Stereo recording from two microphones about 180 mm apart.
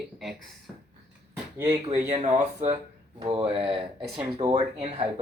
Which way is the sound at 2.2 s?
40° right (ahead or behind).